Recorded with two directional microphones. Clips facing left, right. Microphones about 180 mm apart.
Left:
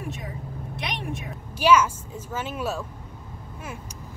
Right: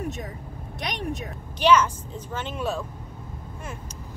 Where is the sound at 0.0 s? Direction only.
40° right (ahead or behind).